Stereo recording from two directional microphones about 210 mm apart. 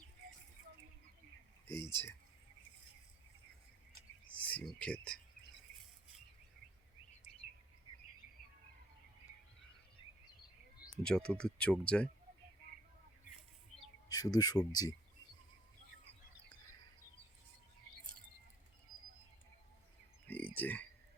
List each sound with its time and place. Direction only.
1.6 s speech: 10° left (ahead or behind)
4.4 s speech: 5° left (ahead or behind)
11.0 s speech: 5° left (ahead or behind)
14.1 s speech: 15° left (ahead or behind)
20.2 s frog: 10° left (ahead or behind)
20.6 s speech: 10° left (ahead or behind)